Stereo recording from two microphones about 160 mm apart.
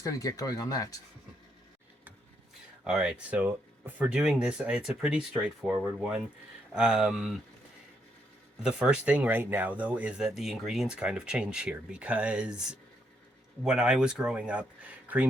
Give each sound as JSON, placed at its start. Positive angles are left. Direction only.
{"t": 0.0, "sound": "speech", "side_deg": 20}
{"t": 2.8, "sound": "speech", "side_deg": -5}
{"t": 8.6, "sound": "speech", "side_deg": -5}
{"t": 13.7, "sound": "speech", "side_deg": -5}